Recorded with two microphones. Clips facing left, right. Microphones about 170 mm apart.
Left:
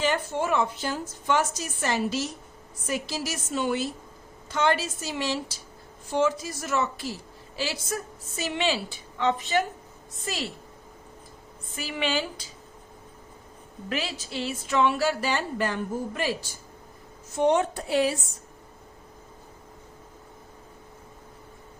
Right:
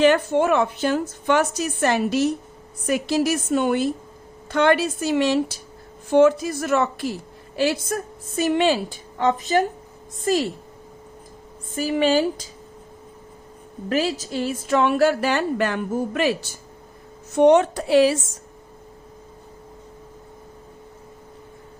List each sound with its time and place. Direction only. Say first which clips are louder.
0.0 s a woman's voice: right 10 dB; 65° right (ahead or behind); by 10.4 s 45° right (ahead or behind)
11.7 s speech: right 10 dB; 45° right (ahead or behind)
13.9 s a woman's voice: right 9 dB; 40° right (ahead or behind); by 18.2 s 90° right